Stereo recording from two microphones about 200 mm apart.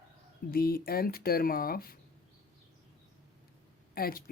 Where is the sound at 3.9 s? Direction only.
50° left (ahead or behind).